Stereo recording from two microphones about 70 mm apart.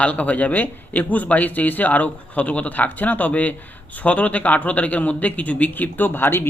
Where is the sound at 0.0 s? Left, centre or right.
Centre.